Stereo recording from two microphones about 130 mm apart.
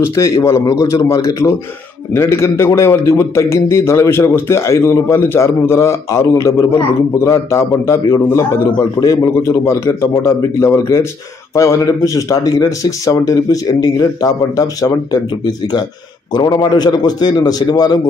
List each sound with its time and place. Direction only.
0.0 s a man's voice: 20° left (ahead or behind)
16.3 s a man's voice: 30° left (ahead or behind)